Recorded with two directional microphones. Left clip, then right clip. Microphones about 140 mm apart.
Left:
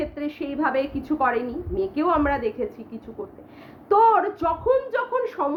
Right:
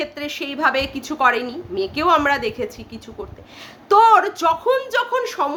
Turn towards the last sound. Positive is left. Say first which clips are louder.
# right 3 dB
turn(degrees=-15)  # may be behind; listen again after turning